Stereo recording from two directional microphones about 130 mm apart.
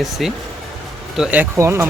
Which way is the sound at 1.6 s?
20° right (ahead or behind).